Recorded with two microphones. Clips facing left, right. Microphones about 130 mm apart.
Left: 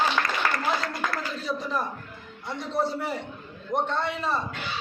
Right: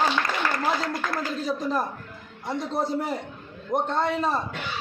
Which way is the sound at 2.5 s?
45° right (ahead or behind).